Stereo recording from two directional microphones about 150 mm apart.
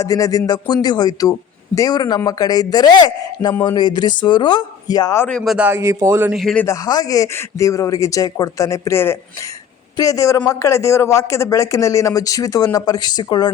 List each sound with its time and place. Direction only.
0.0 s speech: 25° left (ahead or behind)
5.5 s speech: 15° right (ahead or behind)
6.3 s speech: 5° left (ahead or behind)
6.7 s speech: 25° left (ahead or behind)